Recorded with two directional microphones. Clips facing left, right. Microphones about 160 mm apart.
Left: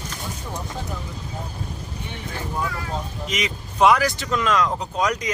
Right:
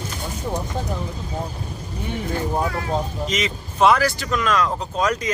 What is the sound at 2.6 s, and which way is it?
Vehicle, 35° right (ahead or behind).